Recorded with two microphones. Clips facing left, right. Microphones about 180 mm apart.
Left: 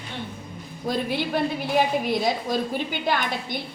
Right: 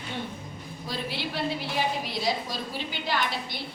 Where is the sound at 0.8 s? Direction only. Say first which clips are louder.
Left 8 dB; 50° left (ahead or behind).